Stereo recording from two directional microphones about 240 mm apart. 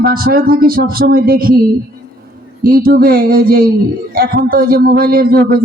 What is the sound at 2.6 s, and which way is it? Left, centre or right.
A man's voice, right.